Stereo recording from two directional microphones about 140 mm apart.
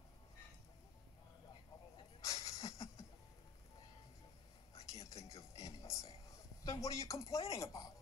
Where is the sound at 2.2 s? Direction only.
25° left (ahead or behind).